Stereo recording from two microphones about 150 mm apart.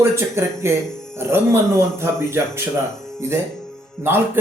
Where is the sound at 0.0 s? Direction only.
15° right (ahead or behind).